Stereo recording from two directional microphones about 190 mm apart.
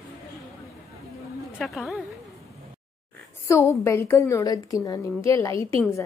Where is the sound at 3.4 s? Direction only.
15° left (ahead or behind).